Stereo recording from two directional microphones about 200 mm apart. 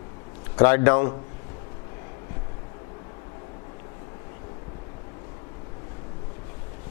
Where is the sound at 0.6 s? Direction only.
15° left (ahead or behind).